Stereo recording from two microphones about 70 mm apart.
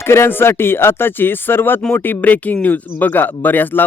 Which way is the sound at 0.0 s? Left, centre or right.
Left.